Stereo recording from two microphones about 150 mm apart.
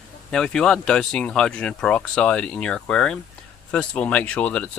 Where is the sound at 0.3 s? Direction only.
5° left (ahead or behind).